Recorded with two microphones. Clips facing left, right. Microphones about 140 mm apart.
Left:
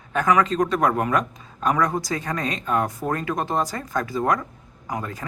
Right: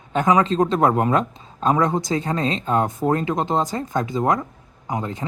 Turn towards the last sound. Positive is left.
turn(degrees=-25)  # may be behind; listen again after turning